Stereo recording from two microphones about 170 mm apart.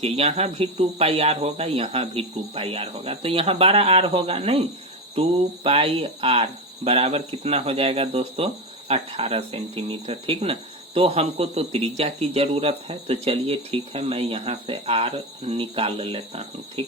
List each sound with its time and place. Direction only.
0.0 s speech: 40° right (ahead or behind)
5.6 s speech: 35° right (ahead or behind)